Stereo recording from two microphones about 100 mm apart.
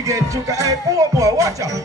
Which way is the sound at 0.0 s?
35° right (ahead or behind).